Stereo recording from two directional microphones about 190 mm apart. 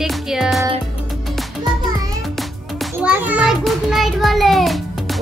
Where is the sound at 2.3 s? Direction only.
5° right (ahead or behind).